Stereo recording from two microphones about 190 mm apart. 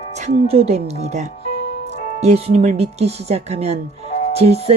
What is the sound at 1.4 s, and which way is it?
Music, 60° left (ahead or behind).